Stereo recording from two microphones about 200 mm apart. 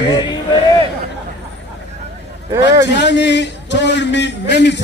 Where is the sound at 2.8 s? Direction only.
60° left (ahead or behind).